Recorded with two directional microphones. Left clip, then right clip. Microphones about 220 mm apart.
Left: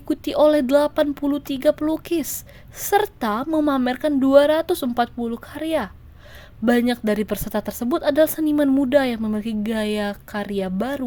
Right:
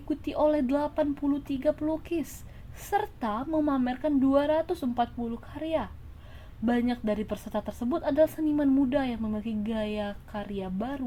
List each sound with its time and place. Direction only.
0.1 s speech: 45° left (ahead or behind)